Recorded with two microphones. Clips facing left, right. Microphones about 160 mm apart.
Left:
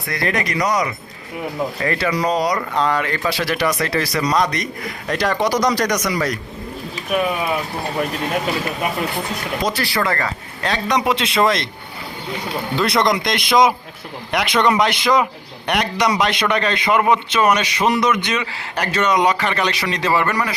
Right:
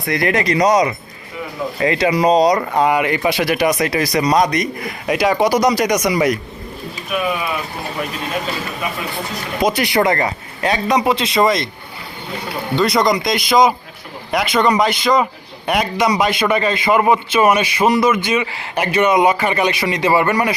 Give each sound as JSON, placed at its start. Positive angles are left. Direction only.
{"t": 0.1, "sound": "speech", "side_deg": -20}
{"t": 9.6, "sound": "speech", "side_deg": -20}
{"t": 10.6, "sound": "a man's voice", "side_deg": -5}
{"t": 12.7, "sound": "a man's voice", "side_deg": 0}